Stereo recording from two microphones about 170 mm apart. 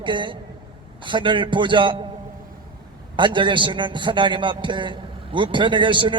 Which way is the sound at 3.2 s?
30° right (ahead or behind).